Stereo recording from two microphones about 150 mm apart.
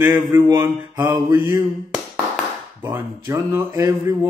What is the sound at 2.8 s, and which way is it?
A man's voice, 15° right (ahead or behind).